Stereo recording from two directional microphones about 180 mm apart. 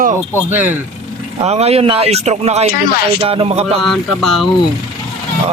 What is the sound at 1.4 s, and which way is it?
Speech, 35° right (ahead or behind).